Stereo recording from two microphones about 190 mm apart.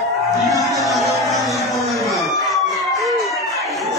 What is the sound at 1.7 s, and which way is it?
Chicken, centre (ahead or behind).